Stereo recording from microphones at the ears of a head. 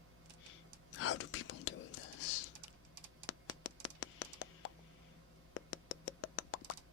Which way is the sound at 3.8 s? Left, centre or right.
Left.